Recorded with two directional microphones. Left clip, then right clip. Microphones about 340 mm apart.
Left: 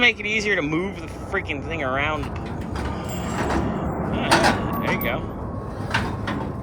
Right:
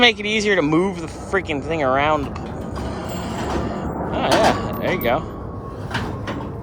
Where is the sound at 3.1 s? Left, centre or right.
Centre.